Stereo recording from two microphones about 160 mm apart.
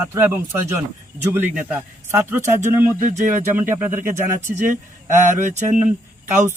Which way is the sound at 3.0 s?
50° right (ahead or behind).